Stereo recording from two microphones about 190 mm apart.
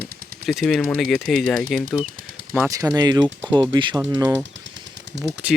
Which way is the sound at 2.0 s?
45° right (ahead or behind).